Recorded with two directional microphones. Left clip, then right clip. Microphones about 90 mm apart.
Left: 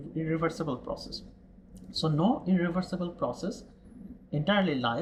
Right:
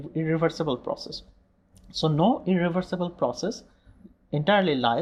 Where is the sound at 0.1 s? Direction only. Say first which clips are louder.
Right 5 dB; 30° right (ahead or behind).